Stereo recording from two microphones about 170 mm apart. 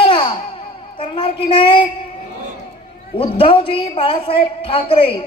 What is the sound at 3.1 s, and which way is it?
A man's voice, 35° left (ahead or behind).